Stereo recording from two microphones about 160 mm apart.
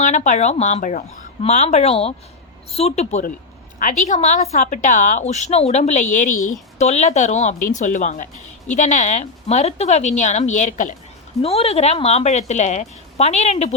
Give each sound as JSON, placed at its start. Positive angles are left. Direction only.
{"t": 0.0, "sound": "a woman's voice", "side_deg": 50}
{"t": 11.4, "sound": "a woman's voice", "side_deg": 40}